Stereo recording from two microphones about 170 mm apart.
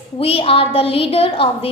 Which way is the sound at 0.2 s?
35° left (ahead or behind).